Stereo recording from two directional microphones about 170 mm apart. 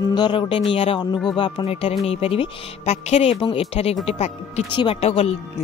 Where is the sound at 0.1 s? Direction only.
25° left (ahead or behind).